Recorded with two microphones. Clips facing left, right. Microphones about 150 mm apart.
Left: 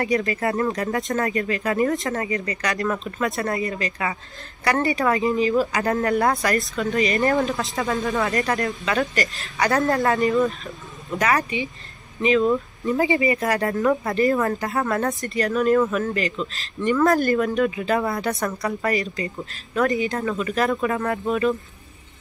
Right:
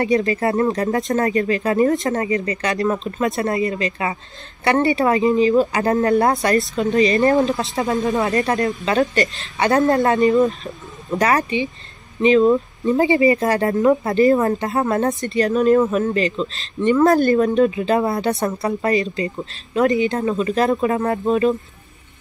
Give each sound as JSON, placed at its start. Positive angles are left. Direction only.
{"t": 0.0, "sound": "speech", "side_deg": -25}
{"t": 10.6, "sound": "speech", "side_deg": -40}